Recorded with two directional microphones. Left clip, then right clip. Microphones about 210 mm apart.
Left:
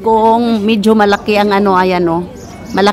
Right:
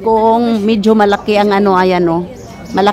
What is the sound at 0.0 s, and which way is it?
A woman's voice, centre (ahead or behind).